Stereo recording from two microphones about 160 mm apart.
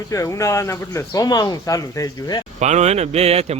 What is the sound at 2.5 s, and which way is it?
Speech, 45° right (ahead or behind).